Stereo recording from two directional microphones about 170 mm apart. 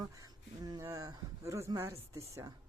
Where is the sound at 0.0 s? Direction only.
20° right (ahead or behind).